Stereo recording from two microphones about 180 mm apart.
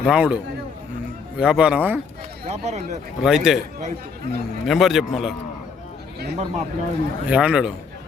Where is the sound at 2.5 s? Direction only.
40° right (ahead or behind).